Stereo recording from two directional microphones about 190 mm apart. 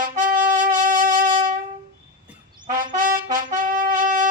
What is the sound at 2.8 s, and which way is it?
Trumpet, 45° right (ahead or behind).